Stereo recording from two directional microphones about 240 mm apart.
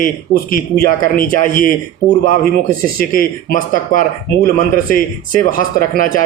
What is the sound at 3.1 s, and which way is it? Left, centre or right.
Speech, left.